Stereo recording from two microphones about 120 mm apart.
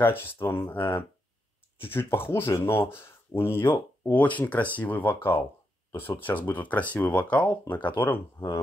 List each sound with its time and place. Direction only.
0.0 s speech: 20° left (ahead or behind)